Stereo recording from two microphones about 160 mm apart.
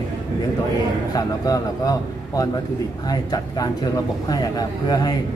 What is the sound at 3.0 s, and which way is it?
A man's voice, 25° left (ahead or behind).